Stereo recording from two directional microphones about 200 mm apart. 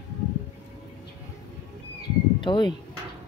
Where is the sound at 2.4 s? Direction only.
20° left (ahead or behind).